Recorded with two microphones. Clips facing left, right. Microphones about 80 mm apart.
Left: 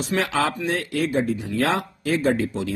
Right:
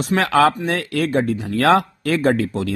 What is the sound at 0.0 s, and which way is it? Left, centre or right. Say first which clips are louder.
Speech: right 7 dB; right.